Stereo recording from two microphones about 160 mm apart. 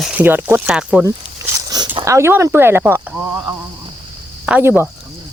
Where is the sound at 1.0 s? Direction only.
20° right (ahead or behind).